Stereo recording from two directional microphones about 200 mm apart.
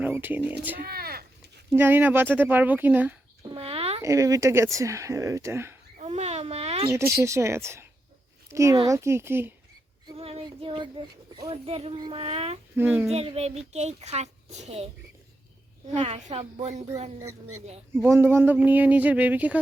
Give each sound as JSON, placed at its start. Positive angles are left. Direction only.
{"t": 0.0, "sound": "speech", "side_deg": -10}
{"t": 0.8, "sound": "speech", "side_deg": -50}
{"t": 1.7, "sound": "speech", "side_deg": -10}
{"t": 3.5, "sound": "a sound", "side_deg": -30}
{"t": 4.0, "sound": "speech", "side_deg": -15}
{"t": 6.0, "sound": "a sound", "side_deg": -35}
{"t": 6.9, "sound": "speech", "side_deg": -15}
{"t": 10.1, "sound": "speech", "side_deg": -30}
{"t": 12.7, "sound": "speech", "side_deg": -10}
{"t": 13.1, "sound": "a child's voice", "side_deg": -30}
{"t": 16.0, "sound": "a child's voice", "side_deg": -30}
{"t": 17.9, "sound": "speech", "side_deg": -10}